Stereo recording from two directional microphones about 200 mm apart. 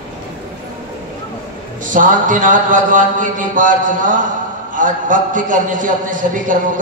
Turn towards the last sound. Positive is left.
turn(degrees=-40)  # may be behind; listen again after turning